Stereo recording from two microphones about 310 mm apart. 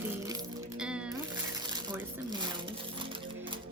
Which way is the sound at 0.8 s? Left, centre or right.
Centre.